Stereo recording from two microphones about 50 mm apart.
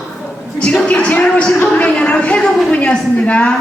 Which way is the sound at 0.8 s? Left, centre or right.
Left.